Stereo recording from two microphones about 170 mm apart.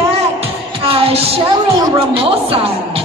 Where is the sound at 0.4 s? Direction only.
35° right (ahead or behind).